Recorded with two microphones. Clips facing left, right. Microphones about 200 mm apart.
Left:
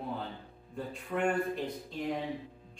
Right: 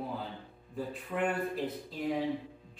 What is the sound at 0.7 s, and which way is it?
A man's voice, 5° right (ahead or behind).